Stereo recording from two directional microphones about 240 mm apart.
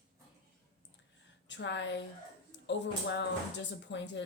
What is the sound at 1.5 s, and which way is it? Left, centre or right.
Speech, left.